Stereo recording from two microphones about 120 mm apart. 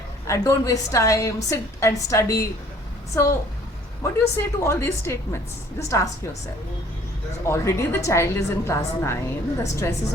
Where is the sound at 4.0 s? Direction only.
20° left (ahead or behind).